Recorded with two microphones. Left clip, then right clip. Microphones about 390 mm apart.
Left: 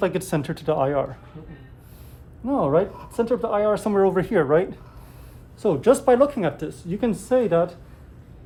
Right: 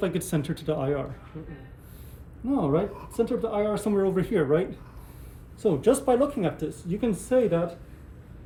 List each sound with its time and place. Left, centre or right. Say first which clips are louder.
0.0 s speech: left 5 dB; centre
2.5 s speech: left 5 dB; centre